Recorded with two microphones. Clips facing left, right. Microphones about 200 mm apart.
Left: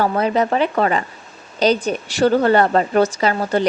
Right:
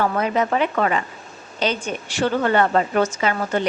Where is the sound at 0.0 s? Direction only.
35° left (ahead or behind).